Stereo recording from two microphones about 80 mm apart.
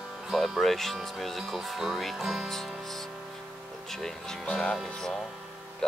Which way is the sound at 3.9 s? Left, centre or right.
Centre.